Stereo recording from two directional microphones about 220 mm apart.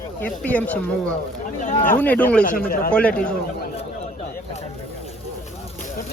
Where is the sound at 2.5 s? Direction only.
40° left (ahead or behind).